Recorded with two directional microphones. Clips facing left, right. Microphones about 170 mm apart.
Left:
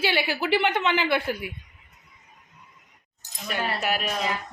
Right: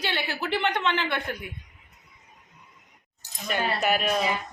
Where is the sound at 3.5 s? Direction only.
5° left (ahead or behind).